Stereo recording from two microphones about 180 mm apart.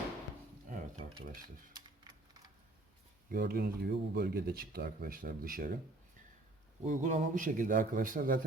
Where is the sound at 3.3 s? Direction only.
60° right (ahead or behind).